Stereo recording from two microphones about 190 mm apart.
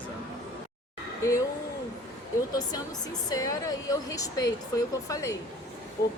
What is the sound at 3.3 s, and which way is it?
Speech, 20° left (ahead or behind).